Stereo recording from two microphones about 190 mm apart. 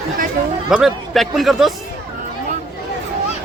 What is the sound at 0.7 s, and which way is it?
Speech, centre (ahead or behind).